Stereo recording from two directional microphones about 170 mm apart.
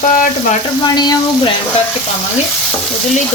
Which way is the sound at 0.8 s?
25° left (ahead or behind).